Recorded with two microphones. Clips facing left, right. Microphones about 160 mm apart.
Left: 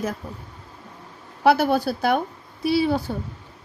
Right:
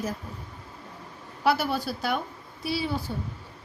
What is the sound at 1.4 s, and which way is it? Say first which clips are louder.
A woman's voice: left 7 dB; 60° left (ahead or behind).